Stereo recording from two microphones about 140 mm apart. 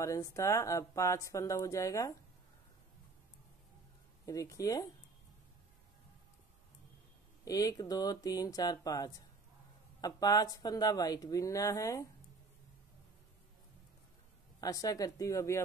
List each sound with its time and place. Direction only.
0.0 s speech: 20° left (ahead or behind)
4.3 s speech: 25° left (ahead or behind)
7.4 s speech: 25° left (ahead or behind)
14.6 s speech: 25° left (ahead or behind)